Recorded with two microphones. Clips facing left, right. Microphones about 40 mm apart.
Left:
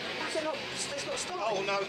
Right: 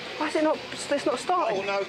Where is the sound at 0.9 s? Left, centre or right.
Right.